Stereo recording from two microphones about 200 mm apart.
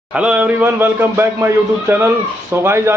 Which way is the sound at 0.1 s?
5° right (ahead or behind).